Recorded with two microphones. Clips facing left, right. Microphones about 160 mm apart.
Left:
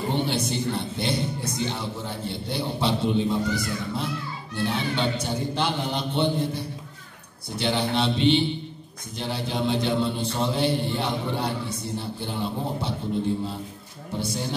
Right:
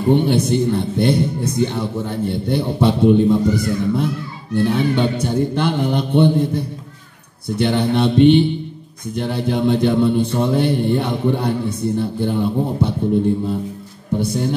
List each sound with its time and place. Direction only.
0.1 s a man's voice: 55° right (ahead or behind)
14.2 s speech: 55° right (ahead or behind)